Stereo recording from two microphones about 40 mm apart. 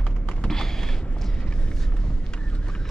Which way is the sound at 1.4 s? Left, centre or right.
Left.